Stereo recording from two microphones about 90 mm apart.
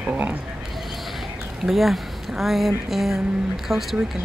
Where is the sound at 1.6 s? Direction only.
Centre (ahead or behind).